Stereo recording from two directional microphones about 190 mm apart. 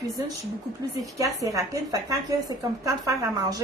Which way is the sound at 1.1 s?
15° right (ahead or behind).